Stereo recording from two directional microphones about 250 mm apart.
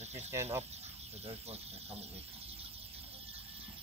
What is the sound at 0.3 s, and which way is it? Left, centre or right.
Speech, centre.